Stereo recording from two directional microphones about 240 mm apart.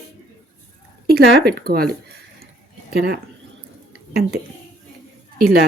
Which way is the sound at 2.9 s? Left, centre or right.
Right.